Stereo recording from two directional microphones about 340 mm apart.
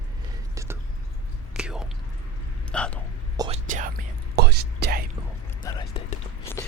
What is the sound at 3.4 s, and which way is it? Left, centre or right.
Whispering, centre.